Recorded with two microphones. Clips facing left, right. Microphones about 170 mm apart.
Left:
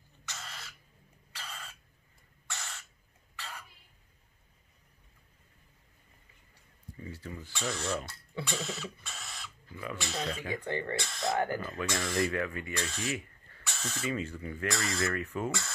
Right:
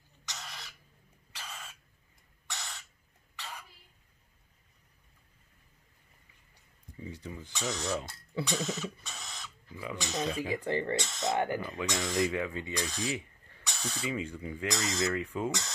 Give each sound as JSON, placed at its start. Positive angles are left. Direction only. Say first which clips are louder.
{"t": 0.2, "sound": "owl", "louder": "even", "side_deg": -15}
{"t": 1.3, "sound": "bird", "louder": "even", "side_deg": -10}
{"t": 2.4, "sound": "crow", "louder": "even", "side_deg": -15}
{"t": 6.5, "sound": "speech", "louder": "left 1 dB", "side_deg": -15}
{"t": 10.6, "sound": "speech", "louder": "right 3 dB", "side_deg": -30}